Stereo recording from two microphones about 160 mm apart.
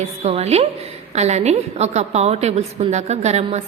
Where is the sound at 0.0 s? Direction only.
40° right (ahead or behind).